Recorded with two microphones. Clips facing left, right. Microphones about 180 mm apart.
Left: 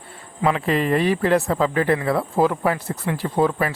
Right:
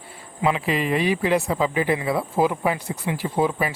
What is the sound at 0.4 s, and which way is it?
Speech, 5° right (ahead or behind).